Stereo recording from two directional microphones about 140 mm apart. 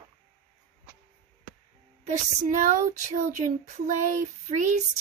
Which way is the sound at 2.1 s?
65° right (ahead or behind).